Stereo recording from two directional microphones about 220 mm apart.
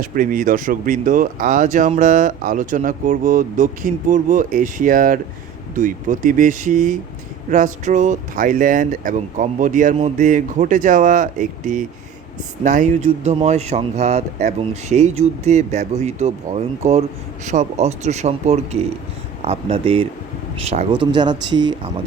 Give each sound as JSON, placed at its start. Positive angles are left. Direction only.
{"t": 0.0, "sound": "speech", "side_deg": -40}